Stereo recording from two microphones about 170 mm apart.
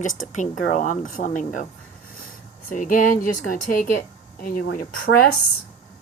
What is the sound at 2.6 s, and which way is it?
A woman's voice, 50° left (ahead or behind).